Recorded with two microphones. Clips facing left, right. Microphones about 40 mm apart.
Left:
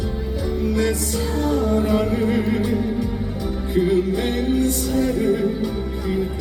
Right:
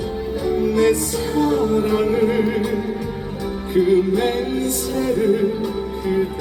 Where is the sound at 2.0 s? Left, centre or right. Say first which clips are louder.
Right 3 dB; centre.